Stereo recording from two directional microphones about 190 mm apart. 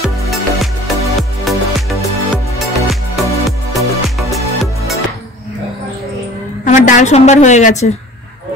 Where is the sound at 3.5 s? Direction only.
Centre (ahead or behind).